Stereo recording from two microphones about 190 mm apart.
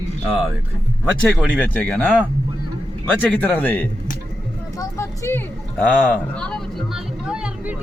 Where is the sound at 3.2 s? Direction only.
10° left (ahead or behind).